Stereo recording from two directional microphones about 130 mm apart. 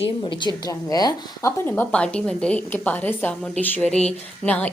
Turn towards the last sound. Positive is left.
turn(degrees=10)  # may be behind; listen again after turning